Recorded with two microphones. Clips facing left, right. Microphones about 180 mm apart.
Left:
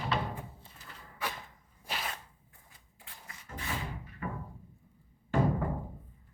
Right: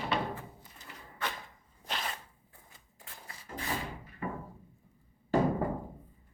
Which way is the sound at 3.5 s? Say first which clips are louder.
Right 3 dB; 30° right (ahead or behind).